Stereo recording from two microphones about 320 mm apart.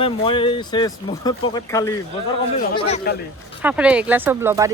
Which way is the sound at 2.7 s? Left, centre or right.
Left.